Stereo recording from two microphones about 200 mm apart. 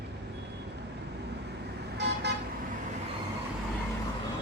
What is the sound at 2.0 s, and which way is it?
Vehicle, 60° right (ahead or behind).